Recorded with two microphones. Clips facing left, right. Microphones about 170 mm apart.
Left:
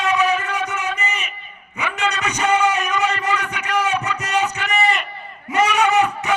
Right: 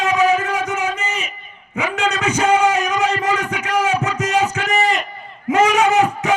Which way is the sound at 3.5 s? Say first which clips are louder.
Right 3 dB; 90° right.